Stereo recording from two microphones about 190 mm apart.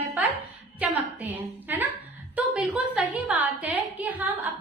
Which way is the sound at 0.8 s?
10° right (ahead or behind).